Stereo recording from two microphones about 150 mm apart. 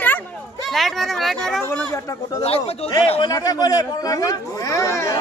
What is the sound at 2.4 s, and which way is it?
Speech, 40° left (ahead or behind).